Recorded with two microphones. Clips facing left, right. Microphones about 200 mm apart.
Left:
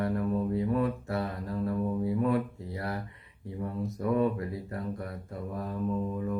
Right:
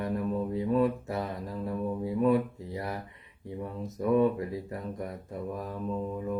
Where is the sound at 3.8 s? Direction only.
20° right (ahead or behind).